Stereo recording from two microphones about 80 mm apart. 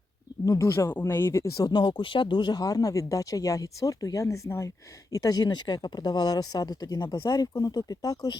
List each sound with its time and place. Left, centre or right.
0.4 s speech: left
0.7 s speech: left
1.6 s speech: left
5.1 s speech: left
7.0 s speech: left
7.5 s speech: left